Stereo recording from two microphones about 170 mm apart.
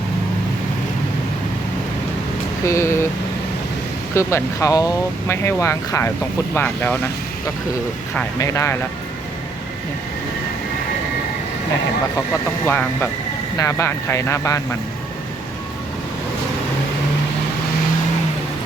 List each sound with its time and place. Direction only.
2.6 s speech: 15° left (ahead or behind)
4.1 s speech: 15° left (ahead or behind)
12.6 s speech: 10° left (ahead or behind)